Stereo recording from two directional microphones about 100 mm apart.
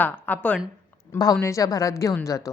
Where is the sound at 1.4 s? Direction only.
35° left (ahead or behind).